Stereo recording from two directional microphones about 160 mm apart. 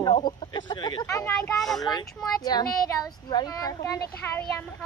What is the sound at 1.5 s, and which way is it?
Speech, centre (ahead or behind).